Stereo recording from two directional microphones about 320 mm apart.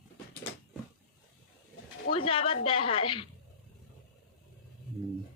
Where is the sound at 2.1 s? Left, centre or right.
Centre.